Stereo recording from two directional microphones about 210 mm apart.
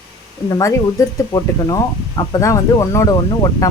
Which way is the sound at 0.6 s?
15° left (ahead or behind).